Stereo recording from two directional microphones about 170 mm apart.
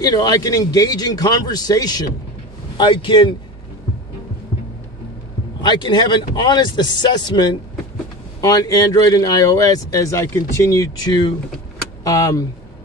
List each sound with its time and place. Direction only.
0.0 s speech: 25° left (ahead or behind)
5.6 s speech: 25° left (ahead or behind)